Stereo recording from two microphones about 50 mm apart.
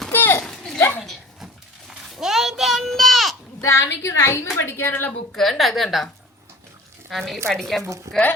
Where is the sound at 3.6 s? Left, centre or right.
Left.